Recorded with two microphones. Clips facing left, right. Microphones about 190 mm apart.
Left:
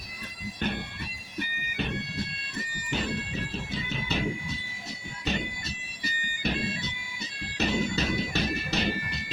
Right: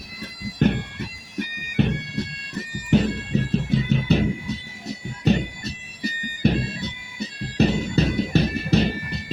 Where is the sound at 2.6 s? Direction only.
40° right (ahead or behind).